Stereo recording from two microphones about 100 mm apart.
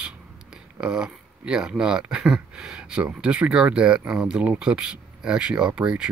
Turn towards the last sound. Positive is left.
turn(degrees=-10)  # may be behind; listen again after turning